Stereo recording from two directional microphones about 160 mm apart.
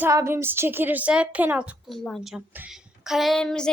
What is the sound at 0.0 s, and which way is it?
A woman's voice, 15° right (ahead or behind).